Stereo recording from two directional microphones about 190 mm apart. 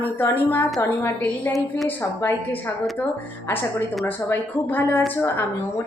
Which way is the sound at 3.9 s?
Centre (ahead or behind).